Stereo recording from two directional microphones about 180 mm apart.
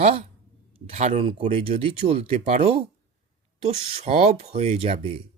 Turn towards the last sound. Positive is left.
turn(degrees=-35)  # may be behind; listen again after turning